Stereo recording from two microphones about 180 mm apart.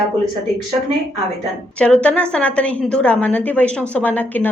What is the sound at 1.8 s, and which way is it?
A woman's voice, 5° left (ahead or behind).